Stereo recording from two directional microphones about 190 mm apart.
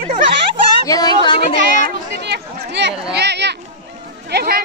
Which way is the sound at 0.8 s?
20° left (ahead or behind).